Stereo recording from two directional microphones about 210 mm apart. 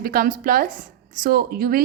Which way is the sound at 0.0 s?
45° right (ahead or behind).